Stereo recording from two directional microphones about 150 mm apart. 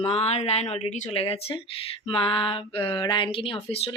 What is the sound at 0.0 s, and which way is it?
Speech, 45° left (ahead or behind).